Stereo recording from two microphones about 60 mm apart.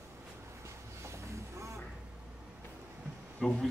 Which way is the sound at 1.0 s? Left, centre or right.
Right.